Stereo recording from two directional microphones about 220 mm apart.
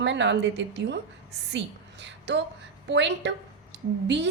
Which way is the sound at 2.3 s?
55° right (ahead or behind).